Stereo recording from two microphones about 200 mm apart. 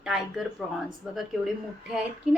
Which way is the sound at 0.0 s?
5° right (ahead or behind).